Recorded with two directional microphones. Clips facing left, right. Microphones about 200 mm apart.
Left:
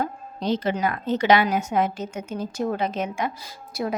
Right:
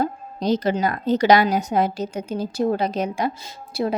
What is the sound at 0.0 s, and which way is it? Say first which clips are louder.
Speech: right 4 dB; 40° right (ahead or behind).